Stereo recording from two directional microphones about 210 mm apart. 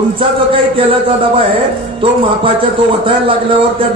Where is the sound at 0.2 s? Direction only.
25° right (ahead or behind).